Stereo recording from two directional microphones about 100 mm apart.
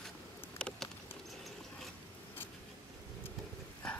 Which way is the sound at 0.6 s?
10° left (ahead or behind).